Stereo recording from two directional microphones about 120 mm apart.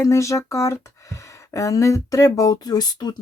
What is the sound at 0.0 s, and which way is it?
Speech, 25° left (ahead or behind).